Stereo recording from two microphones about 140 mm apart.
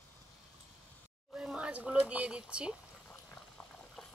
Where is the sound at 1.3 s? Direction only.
5° right (ahead or behind).